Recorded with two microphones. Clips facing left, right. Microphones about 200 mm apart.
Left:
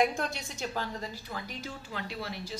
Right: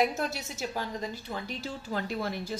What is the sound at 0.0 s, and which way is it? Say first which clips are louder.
Speech: even; 5° right (ahead or behind).